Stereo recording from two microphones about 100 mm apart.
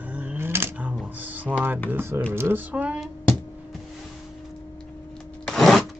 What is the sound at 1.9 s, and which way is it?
Speech, 20° right (ahead or behind).